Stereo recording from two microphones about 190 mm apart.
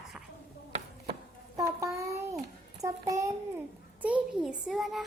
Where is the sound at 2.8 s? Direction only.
15° right (ahead or behind).